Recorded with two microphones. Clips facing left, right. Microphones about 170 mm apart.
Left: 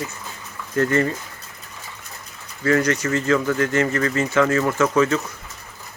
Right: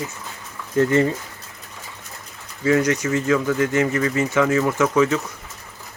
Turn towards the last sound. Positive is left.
turn(degrees=-15)  # may be behind; listen again after turning